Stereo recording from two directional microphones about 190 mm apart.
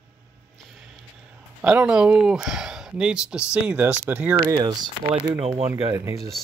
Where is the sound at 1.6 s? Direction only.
5° right (ahead or behind).